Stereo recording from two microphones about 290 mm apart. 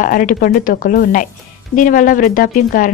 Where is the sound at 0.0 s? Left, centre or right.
Left.